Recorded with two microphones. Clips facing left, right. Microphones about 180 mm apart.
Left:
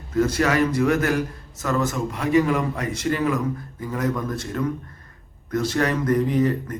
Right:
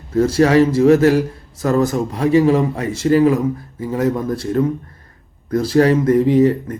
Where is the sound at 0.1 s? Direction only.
30° right (ahead or behind).